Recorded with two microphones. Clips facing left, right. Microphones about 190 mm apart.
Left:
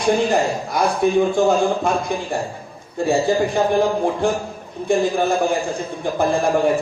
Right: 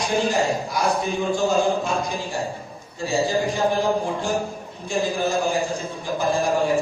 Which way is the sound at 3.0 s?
55° left (ahead or behind).